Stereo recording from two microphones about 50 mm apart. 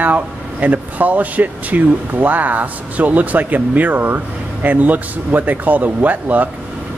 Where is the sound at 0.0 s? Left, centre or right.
Right.